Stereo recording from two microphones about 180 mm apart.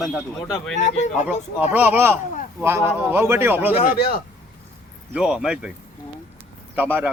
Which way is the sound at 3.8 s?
55° left (ahead or behind).